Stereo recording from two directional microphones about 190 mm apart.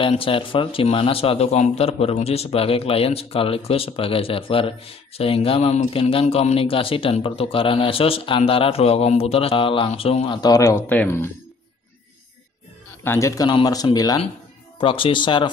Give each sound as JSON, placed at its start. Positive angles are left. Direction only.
{"t": 0.0, "sound": "speech", "side_deg": 30}
{"t": 13.0, "sound": "speech", "side_deg": 15}